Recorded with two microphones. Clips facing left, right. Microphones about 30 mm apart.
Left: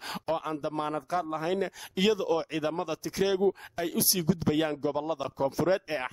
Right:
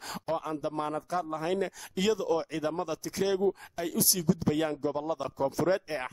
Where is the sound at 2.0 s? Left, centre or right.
Left.